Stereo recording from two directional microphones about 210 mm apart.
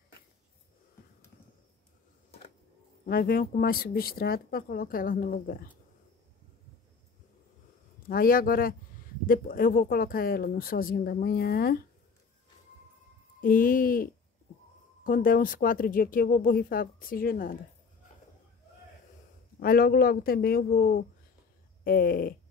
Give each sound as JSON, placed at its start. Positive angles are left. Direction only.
{"t": 3.1, "sound": "speech", "side_deg": 45}
{"t": 8.1, "sound": "speech", "side_deg": 45}
{"t": 13.4, "sound": "speech", "side_deg": 40}
{"t": 15.0, "sound": "speech", "side_deg": 40}
{"t": 19.6, "sound": "speech", "side_deg": 45}